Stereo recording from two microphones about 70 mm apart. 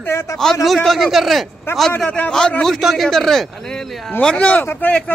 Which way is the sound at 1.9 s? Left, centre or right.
Centre.